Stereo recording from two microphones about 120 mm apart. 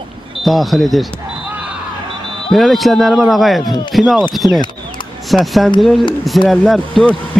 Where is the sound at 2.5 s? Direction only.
Centre (ahead or behind).